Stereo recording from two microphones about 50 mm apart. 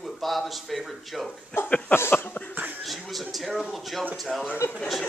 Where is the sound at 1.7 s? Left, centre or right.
Left.